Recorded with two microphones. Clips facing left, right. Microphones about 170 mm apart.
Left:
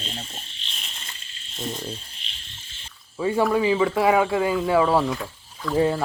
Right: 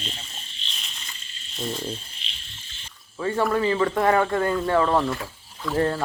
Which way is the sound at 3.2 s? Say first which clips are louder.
Left 2 dB; 10° left (ahead or behind).